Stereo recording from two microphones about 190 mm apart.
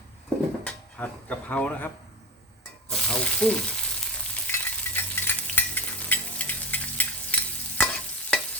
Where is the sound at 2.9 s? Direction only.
5° left (ahead or behind).